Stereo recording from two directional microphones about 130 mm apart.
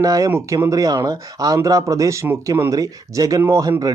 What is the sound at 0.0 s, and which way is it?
Speech, 25° right (ahead or behind).